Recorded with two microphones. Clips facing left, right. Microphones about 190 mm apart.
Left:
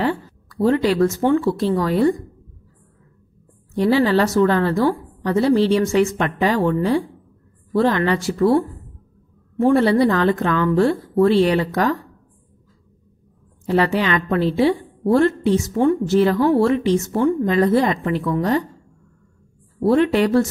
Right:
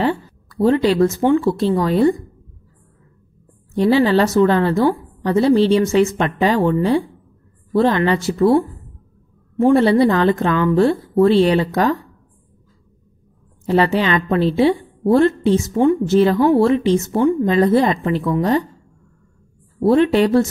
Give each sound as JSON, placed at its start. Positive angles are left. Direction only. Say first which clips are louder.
{"t": 0.0, "sound": "speech", "louder": "right 2 dB", "side_deg": -25}
{"t": 3.7, "sound": "a woman's voice", "louder": "right 2 dB", "side_deg": -25}
{"t": 13.7, "sound": "a woman's voice", "louder": "right 2 dB", "side_deg": -25}
{"t": 19.8, "sound": "a woman's voice", "louder": "right 2 dB", "side_deg": -25}